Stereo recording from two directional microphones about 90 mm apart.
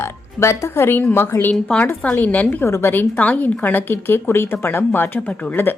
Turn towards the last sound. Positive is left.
turn(degrees=25)  # may be behind; listen again after turning